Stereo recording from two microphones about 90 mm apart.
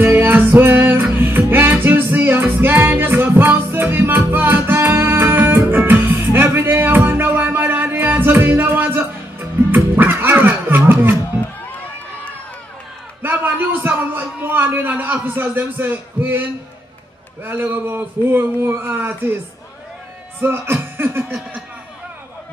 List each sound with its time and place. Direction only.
0.0 s music: 20° right (ahead or behind)
9.9 s a sound: 20° right (ahead or behind)
10.9 s music: 25° right (ahead or behind)
13.2 s a sound: 20° right (ahead or behind)
17.5 s speech: 25° right (ahead or behind)
20.3 s chuckle: 25° right (ahead or behind)